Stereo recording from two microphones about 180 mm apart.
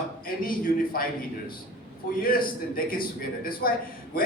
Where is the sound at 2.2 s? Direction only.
55° left (ahead or behind).